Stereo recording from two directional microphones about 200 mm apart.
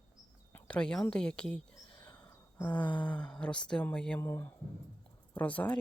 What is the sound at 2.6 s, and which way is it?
Speech, 5° left (ahead or behind).